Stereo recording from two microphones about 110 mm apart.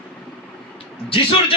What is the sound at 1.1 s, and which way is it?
Speech, 55° left (ahead or behind).